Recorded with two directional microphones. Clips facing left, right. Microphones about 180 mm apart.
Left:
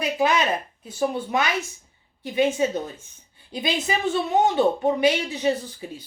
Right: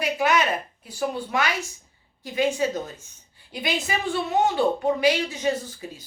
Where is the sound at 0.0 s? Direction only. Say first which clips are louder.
Left 1 dB; 25° left (ahead or behind).